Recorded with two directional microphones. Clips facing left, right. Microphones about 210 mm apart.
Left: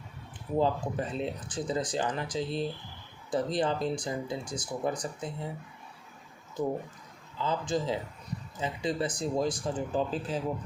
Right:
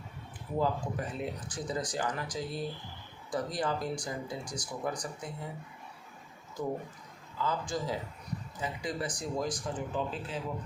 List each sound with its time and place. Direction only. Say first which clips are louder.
0.6 s speech: left 3 dB; 25° left (ahead or behind)
7.3 s speech: left 3 dB; 20° left (ahead or behind); by 10.4 s 35° left (ahead or behind)